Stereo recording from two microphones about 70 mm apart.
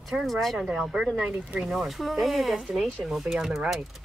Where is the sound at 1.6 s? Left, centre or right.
Centre.